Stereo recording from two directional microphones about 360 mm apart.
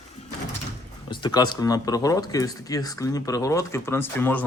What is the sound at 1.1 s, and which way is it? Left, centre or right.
A man's voice, centre.